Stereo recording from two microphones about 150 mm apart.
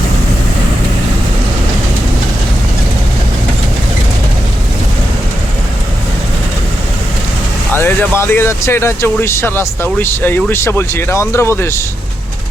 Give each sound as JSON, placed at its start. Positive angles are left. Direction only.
{"t": 7.7, "sound": "speech", "side_deg": 15}